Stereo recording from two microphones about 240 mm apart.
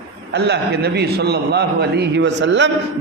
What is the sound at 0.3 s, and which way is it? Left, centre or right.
A man's voice, right.